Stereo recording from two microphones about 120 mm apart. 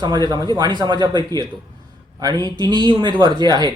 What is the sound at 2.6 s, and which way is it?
A man's voice, 35° right (ahead or behind).